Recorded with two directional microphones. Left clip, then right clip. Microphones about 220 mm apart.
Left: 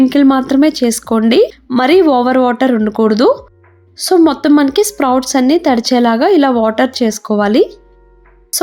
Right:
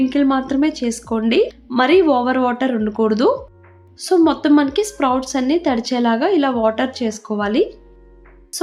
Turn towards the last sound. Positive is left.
turn(degrees=35)  # may be behind; listen again after turning